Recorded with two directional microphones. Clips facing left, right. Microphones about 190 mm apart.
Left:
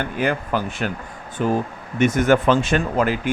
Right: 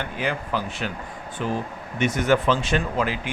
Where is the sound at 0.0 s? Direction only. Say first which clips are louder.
Left 5 dB; 50° left (ahead or behind).